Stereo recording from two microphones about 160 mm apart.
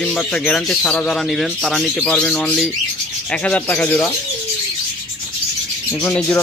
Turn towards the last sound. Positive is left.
turn(degrees=5)  # may be behind; listen again after turning